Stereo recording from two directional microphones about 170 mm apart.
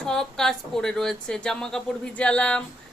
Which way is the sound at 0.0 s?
5° left (ahead or behind).